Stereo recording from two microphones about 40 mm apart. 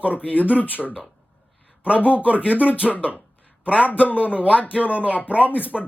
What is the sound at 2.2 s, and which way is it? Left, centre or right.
Speech, right.